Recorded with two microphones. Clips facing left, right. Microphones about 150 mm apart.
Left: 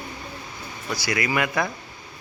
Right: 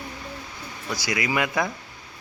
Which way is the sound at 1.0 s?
15° right (ahead or behind).